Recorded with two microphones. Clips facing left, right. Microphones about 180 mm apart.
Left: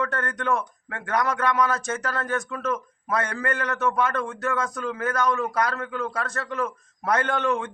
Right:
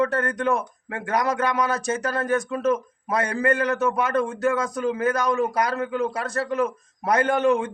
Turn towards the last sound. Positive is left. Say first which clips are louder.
# right 5 dB
turn(degrees=-15)  # may be behind; listen again after turning